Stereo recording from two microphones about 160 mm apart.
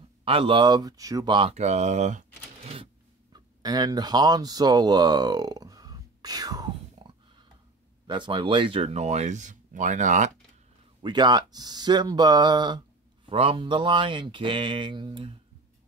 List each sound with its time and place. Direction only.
0.2 s speech: 35° right (ahead or behind)
1.5 s speech: 45° right (ahead or behind)
3.3 s speech: 25° right (ahead or behind)
8.1 s speech: 30° right (ahead or behind); by 10.3 s 50° right (ahead or behind)
11.0 s speech: 25° right (ahead or behind)